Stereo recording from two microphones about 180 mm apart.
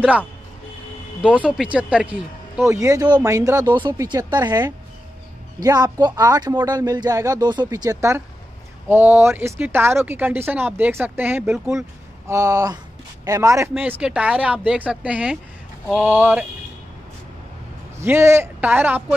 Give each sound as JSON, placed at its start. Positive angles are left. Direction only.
{"t": 0.0, "sound": "speech", "side_deg": -10}
{"t": 17.9, "sound": "speech", "side_deg": -15}